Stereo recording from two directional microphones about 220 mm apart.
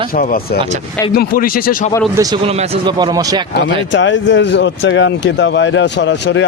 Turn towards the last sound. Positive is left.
turn(degrees=55)  # may be behind; listen again after turning